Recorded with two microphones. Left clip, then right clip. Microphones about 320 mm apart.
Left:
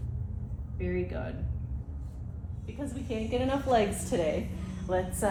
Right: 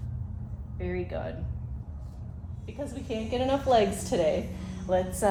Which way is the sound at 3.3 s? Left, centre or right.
Right.